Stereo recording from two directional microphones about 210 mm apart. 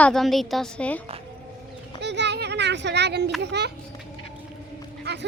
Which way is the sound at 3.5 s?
50° right (ahead or behind).